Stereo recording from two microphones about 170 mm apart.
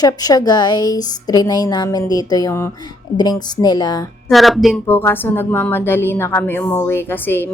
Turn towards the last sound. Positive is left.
turn(degrees=15)  # may be behind; listen again after turning